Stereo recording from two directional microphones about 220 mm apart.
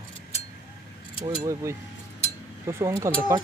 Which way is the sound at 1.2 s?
15° right (ahead or behind).